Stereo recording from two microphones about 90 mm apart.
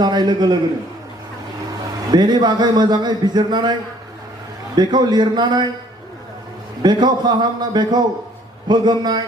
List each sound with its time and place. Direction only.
0.0 s a man's voice: 50° right (ahead or behind)
2.1 s a man's voice: 50° right (ahead or behind)
6.8 s a man's voice: 55° right (ahead or behind)